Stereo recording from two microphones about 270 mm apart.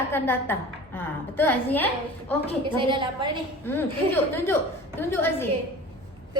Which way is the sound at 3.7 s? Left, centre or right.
Centre.